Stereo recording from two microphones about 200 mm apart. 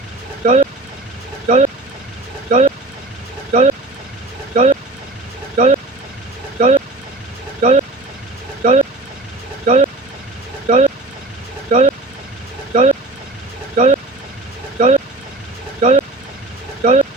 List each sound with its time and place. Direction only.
0.4 s speech: 35° right (ahead or behind)